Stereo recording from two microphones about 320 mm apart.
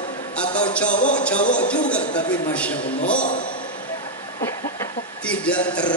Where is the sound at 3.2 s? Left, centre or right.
Left.